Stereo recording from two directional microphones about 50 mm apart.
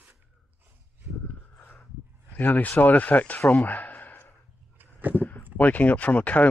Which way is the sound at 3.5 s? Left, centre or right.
Left.